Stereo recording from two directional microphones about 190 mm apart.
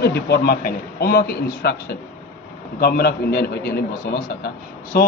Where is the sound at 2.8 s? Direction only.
55° left (ahead or behind).